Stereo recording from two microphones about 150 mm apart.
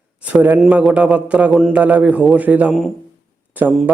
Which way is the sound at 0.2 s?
10° right (ahead or behind).